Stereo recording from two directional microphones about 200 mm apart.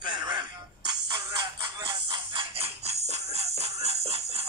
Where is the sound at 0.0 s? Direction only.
20° right (ahead or behind).